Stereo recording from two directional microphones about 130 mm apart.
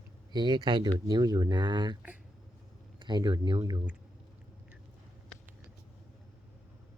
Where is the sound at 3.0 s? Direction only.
35° right (ahead or behind).